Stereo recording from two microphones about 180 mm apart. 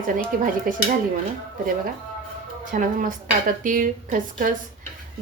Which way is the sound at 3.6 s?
50° right (ahead or behind).